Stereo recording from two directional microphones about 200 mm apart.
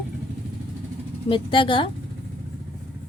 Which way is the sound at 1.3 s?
25° left (ahead or behind).